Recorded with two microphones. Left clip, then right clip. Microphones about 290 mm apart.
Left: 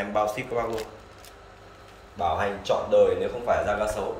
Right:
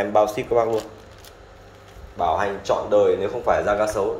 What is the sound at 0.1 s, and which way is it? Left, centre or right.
Speech, centre.